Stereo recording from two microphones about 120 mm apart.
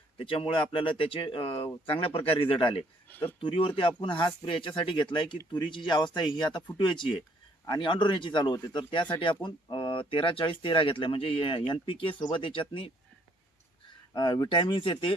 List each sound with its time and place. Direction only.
0.2 s speech: 50° left (ahead or behind)
3.1 s speech: 15° left (ahead or behind)
3.4 s speech: 45° left (ahead or behind)
14.1 s speech: 35° left (ahead or behind)